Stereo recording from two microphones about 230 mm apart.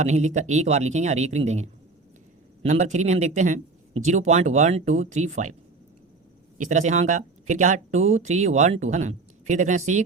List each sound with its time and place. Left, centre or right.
0.0 s speech: right
6.6 s speech: right